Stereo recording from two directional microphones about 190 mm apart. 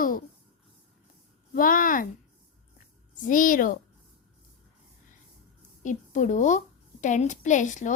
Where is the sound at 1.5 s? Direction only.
45° left (ahead or behind).